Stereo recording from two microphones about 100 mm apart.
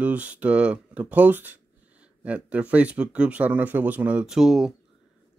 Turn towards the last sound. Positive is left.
turn(degrees=-5)  # may be behind; listen again after turning